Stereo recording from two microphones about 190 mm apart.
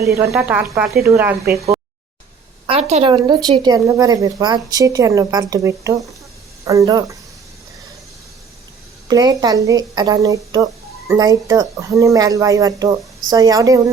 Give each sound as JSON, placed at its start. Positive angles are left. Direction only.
{"t": 0.3, "sound": "speech", "side_deg": -10}
{"t": 2.6, "sound": "speech", "side_deg": -35}
{"t": 9.0, "sound": "speech", "side_deg": -20}